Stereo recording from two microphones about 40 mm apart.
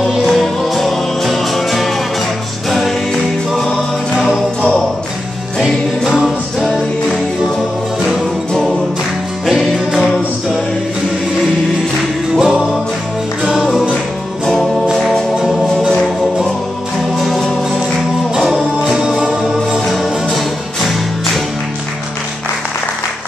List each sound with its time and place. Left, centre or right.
0.2 s music: centre
3.7 s music: centre
5.6 s music: centre
12.4 s music: centre
14.4 s music: centre
15.3 s music: centre
18.8 s music: centre
19.9 s music: centre